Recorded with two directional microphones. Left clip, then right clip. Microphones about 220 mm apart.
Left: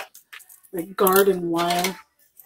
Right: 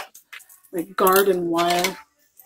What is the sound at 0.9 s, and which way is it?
Speech, 45° right (ahead or behind).